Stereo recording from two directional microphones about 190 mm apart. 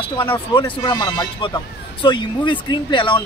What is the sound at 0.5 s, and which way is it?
Speech, 25° left (ahead or behind).